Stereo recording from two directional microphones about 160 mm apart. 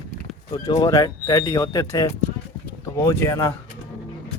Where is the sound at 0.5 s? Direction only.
25° left (ahead or behind).